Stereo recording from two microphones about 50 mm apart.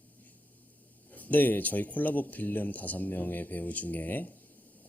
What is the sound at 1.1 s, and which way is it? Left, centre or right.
Speech, left.